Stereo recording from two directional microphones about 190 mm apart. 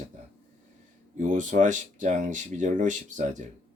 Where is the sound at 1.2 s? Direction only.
40° right (ahead or behind).